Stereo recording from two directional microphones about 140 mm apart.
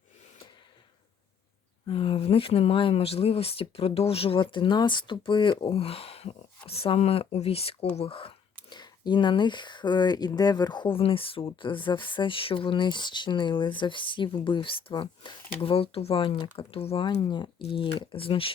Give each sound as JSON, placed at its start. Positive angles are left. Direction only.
{"t": 1.9, "sound": "speech", "side_deg": 40}